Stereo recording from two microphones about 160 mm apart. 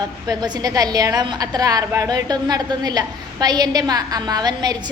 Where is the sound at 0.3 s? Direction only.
25° right (ahead or behind).